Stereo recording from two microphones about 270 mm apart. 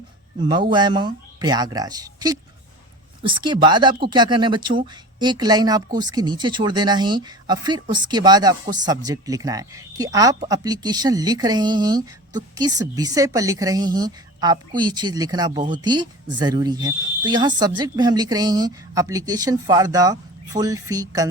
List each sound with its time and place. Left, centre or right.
0.3 s speech: centre